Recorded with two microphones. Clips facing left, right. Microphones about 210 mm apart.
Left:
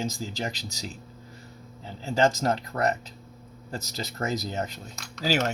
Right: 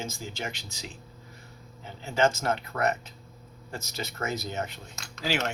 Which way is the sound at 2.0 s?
35° left (ahead or behind).